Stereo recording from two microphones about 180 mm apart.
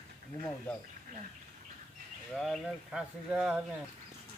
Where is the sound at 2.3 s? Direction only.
Centre (ahead or behind).